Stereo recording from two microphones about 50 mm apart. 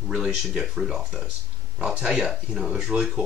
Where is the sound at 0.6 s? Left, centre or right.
Centre.